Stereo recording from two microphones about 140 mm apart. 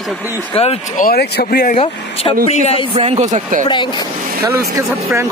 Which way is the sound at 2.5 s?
55° left (ahead or behind).